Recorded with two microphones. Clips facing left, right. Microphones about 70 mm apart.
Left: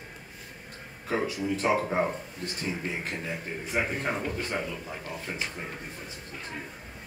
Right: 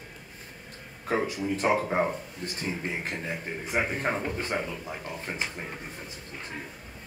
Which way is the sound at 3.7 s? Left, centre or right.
Centre.